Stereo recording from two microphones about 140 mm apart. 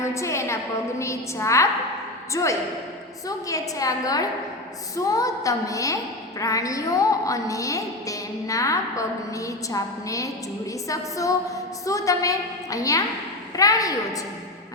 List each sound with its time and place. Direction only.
0.0 s a woman's voice: 20° left (ahead or behind)